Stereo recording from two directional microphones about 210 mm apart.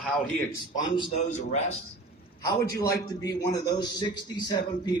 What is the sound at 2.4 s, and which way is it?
A man's voice, 15° left (ahead or behind).